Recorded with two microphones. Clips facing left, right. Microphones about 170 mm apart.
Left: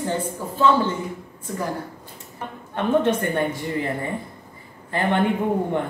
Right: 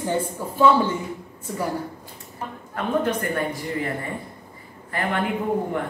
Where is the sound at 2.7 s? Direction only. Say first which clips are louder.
Left 4 dB; 25° left (ahead or behind).